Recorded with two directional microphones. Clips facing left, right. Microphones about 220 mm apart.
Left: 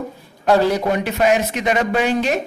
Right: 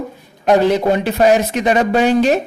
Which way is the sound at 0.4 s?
20° right (ahead or behind).